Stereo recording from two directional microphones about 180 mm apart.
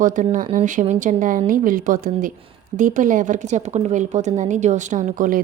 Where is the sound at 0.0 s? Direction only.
45° right (ahead or behind).